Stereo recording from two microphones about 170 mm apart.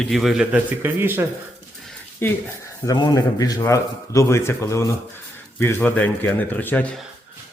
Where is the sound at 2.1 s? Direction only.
15° left (ahead or behind).